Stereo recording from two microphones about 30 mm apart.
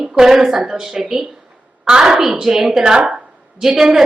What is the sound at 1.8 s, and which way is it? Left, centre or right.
A woman's voice, right.